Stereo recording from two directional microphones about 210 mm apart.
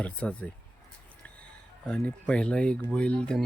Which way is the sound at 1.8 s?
5° left (ahead or behind).